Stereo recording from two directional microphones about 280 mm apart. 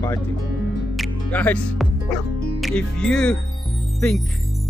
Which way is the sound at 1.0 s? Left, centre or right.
Centre.